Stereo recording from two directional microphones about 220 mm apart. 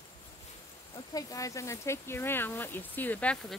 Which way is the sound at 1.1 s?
15° left (ahead or behind).